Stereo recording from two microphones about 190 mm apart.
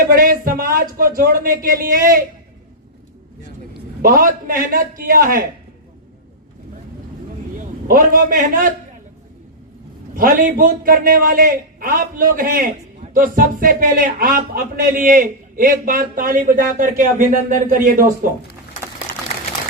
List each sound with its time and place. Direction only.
0.0 s a man's voice: 50° right (ahead or behind)
4.0 s a man's voice: 45° right (ahead or behind)
7.6 s a man's voice: 45° right (ahead or behind)
10.2 s a man's voice: 45° right (ahead or behind)